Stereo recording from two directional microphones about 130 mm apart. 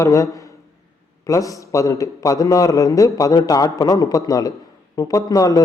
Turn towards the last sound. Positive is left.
turn(degrees=30)  # may be behind; listen again after turning